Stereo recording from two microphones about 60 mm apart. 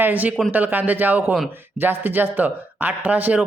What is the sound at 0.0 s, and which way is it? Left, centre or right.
A man's voice, right.